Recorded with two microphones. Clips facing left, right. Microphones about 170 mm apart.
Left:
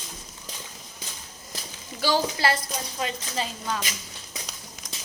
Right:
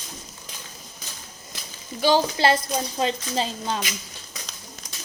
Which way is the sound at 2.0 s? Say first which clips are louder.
Right 4 dB; 25° right (ahead or behind).